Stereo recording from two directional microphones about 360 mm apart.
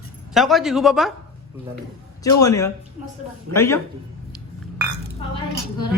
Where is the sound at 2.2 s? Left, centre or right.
Centre.